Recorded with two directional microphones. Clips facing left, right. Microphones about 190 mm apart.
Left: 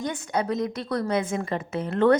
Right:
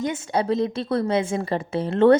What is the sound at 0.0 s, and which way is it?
A woman's voice, 25° right (ahead or behind).